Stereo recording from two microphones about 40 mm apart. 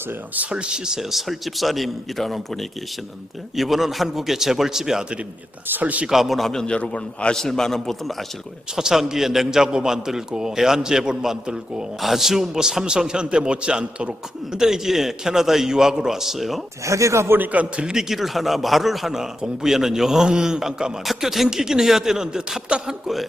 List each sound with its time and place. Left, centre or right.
0.5 s a man's voice: right
1.1 s a man's voice: centre
5.8 s a man's voice: right
6.1 s a man's voice: centre
6.7 s a man's voice: left
7.3 s a man's voice: centre
8.7 s a man's voice: centre
11.9 s a man's voice: centre; by 14.6 s right
14.6 s a man's voice: centre
17.4 s a man's voice: right
18.1 s a man's voice: centre